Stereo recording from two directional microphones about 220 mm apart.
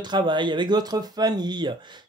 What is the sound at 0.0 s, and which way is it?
Speech, 20° right (ahead or behind).